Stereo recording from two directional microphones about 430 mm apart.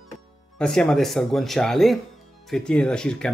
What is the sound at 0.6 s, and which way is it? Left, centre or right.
Speech, centre.